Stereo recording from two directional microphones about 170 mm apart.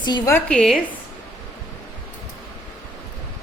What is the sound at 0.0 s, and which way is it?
Speech, 25° left (ahead or behind).